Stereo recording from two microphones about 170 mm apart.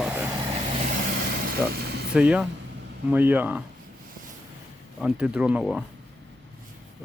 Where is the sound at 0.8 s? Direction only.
55° right (ahead or behind).